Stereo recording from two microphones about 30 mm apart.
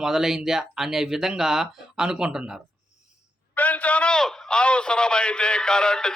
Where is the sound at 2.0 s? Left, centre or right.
Right.